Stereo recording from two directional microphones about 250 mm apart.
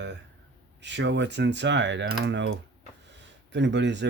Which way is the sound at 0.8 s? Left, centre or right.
Right.